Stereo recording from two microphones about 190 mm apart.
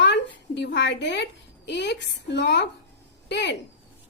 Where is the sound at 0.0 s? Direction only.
65° left (ahead or behind).